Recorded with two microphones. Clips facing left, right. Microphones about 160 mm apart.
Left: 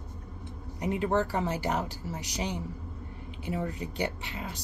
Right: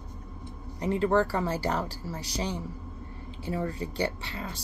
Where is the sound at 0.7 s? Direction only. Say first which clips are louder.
Right 3 dB; 15° left (ahead or behind).